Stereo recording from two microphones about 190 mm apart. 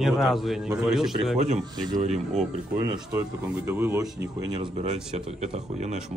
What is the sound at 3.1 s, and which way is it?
Speech, 15° right (ahead or behind).